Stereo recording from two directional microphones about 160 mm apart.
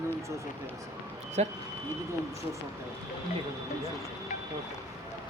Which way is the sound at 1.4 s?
45° right (ahead or behind).